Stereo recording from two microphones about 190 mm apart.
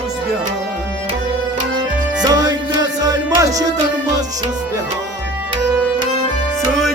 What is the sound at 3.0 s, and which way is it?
Music, 20° right (ahead or behind).